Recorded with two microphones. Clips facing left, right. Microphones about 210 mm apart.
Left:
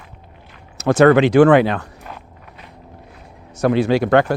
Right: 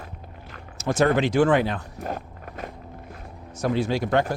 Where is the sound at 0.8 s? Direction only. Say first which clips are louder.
Left 9 dB; 70° left (ahead or behind).